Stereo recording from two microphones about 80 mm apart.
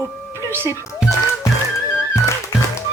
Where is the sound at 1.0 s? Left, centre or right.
Centre.